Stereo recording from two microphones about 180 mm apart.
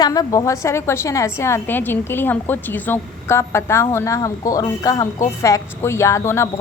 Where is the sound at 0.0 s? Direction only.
20° left (ahead or behind).